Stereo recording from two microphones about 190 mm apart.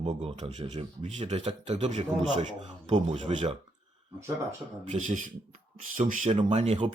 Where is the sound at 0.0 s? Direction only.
35° right (ahead or behind).